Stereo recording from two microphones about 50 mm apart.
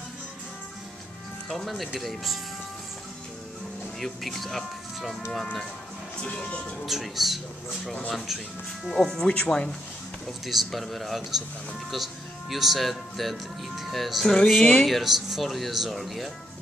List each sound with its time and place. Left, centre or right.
1.5 s speech: centre
4.0 s speech: centre
6.9 s speech: centre
8.8 s speech: centre
10.4 s speech: centre